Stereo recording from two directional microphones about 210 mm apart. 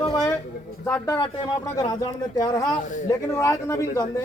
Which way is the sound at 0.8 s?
15° left (ahead or behind).